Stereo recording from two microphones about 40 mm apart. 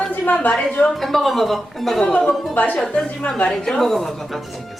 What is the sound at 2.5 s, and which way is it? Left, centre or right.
Speech, left.